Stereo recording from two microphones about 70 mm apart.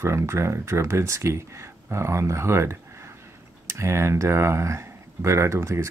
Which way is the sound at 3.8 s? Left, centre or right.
Right.